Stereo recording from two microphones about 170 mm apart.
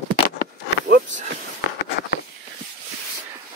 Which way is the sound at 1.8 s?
85° left.